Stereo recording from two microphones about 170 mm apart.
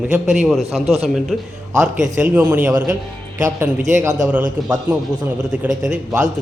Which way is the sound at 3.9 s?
15° right (ahead or behind).